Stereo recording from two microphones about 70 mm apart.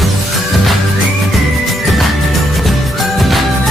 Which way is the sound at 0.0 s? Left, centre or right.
Centre.